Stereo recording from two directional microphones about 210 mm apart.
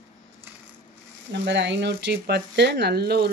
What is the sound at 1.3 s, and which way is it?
Speech, 55° right (ahead or behind).